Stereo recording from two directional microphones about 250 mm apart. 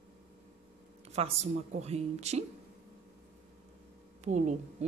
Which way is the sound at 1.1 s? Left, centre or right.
Right.